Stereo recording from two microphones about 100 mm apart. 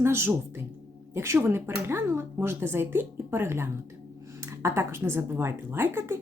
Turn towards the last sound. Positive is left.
turn(degrees=-25)  # may be behind; listen again after turning